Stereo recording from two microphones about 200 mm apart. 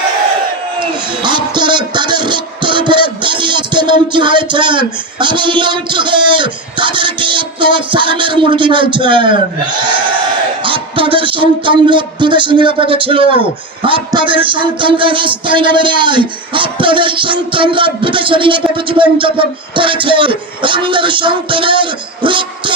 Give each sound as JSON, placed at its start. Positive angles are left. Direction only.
{"t": 0.8, "sound": "speech", "side_deg": -20}
{"t": 10.6, "sound": "music", "side_deg": -25}